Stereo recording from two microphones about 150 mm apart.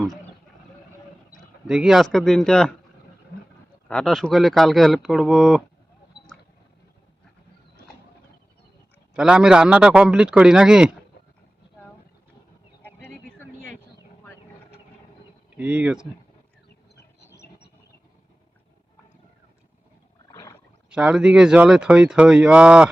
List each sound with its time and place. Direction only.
1.6 s speech: 5° right (ahead or behind)
3.8 s speech: 5° left (ahead or behind)
9.1 s speech: 5° right (ahead or behind)
12.8 s a sound: 15° left (ahead or behind)
15.5 s speech: 10° right (ahead or behind)
16.6 s a sound: 90° left
20.9 s speech: 5° right (ahead or behind)